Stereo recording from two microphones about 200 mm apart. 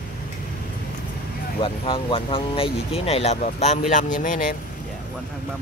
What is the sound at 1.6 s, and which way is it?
Speech, 25° left (ahead or behind).